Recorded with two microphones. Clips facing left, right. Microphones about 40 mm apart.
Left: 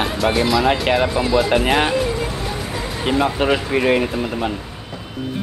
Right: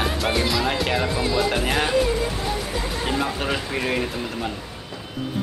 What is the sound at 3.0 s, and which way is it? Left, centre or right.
Speech, left.